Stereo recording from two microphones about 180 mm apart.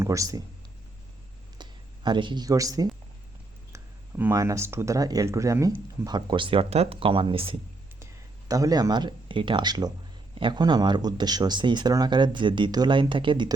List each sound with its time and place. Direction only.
0.0 s speech: 15° right (ahead or behind)
2.0 s speech: 25° right (ahead or behind)
4.2 s speech: 15° right (ahead or behind)
8.4 s speech: 20° right (ahead or behind)